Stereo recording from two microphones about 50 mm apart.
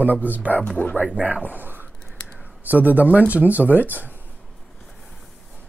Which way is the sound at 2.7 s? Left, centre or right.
Right.